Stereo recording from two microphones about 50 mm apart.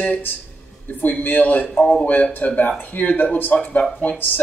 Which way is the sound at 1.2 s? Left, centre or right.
Left.